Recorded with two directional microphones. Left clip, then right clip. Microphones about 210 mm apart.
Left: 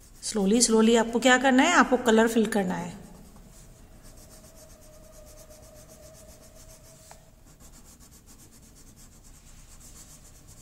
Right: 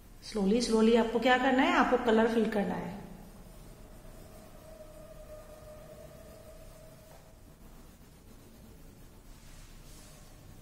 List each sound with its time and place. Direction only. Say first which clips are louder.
0.2 s a woman's voice: left 6 dB; 40° left (ahead or behind)